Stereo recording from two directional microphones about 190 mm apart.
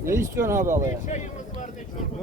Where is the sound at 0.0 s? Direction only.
15° right (ahead or behind).